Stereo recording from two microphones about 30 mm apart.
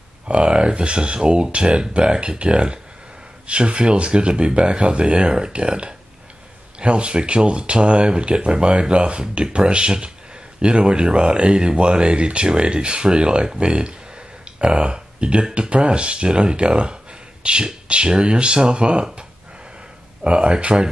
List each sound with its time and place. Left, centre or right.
0.3 s speech: right
20.2 s speech: right